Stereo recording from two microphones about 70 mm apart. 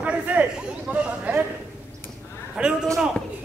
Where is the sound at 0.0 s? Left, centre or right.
Right.